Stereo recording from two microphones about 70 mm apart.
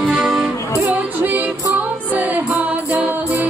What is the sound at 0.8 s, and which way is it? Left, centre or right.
Music, right.